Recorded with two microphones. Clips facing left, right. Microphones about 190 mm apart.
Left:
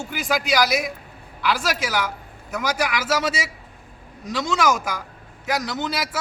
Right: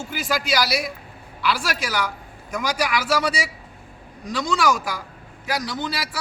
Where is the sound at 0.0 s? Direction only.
15° left (ahead or behind).